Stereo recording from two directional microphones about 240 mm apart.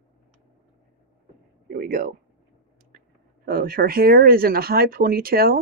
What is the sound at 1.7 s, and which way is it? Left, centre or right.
Speech, right.